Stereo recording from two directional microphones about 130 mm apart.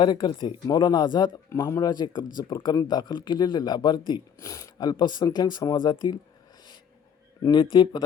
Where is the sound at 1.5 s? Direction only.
25° left (ahead or behind).